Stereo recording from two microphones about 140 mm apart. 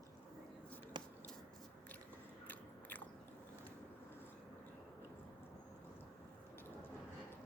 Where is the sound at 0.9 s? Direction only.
30° right (ahead or behind).